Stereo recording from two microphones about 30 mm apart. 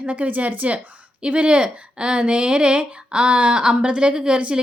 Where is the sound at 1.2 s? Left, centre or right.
Right.